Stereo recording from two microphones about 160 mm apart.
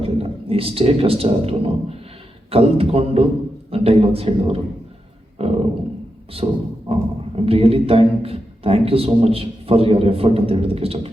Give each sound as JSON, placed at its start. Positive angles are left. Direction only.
{"t": 0.0, "sound": "a man's voice", "side_deg": -35}